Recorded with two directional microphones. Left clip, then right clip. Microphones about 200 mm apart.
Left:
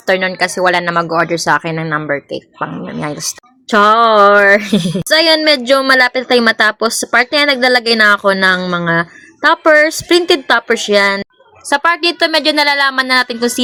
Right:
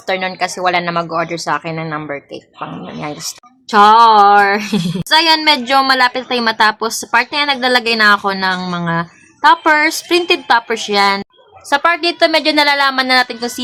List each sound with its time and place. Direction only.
0.0 s a woman's voice: 15° left (ahead or behind)